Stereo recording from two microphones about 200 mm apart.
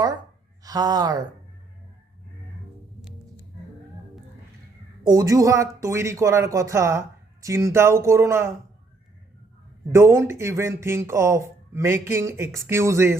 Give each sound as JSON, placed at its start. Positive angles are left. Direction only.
{"t": 0.6, "sound": "speech", "side_deg": -20}
{"t": 5.0, "sound": "speech", "side_deg": -20}
{"t": 9.9, "sound": "speech", "side_deg": -15}